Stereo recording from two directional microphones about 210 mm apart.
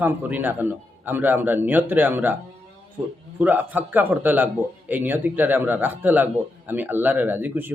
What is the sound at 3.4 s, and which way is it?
A man's voice, 10° right (ahead or behind).